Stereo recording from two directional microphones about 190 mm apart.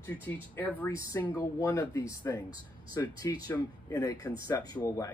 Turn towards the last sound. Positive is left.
turn(degrees=20)  # may be behind; listen again after turning